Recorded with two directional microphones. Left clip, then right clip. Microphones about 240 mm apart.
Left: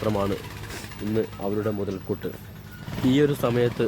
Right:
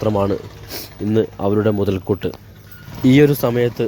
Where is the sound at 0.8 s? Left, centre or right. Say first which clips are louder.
Right 9 dB; right.